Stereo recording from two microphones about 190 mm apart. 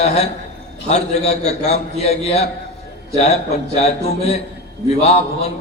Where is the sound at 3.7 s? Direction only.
35° left (ahead or behind).